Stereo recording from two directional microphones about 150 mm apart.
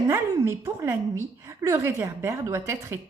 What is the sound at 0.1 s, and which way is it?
A woman's voice, 20° right (ahead or behind).